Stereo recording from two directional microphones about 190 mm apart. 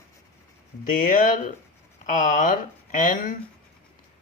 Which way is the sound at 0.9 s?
45° left (ahead or behind).